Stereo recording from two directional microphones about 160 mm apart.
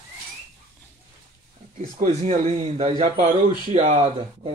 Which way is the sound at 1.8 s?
45° right (ahead or behind).